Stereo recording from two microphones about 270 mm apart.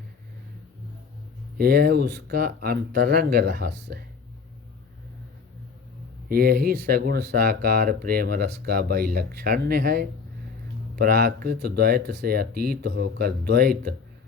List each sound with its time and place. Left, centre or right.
1.5 s speech: right
6.2 s speech: right